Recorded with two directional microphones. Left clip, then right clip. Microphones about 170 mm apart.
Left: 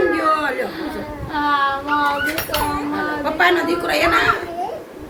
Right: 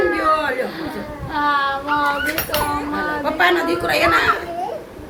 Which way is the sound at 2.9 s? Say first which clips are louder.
Even; 10° right (ahead or behind).